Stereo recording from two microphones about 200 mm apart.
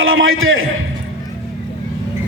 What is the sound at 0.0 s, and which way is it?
Speech, 85° right.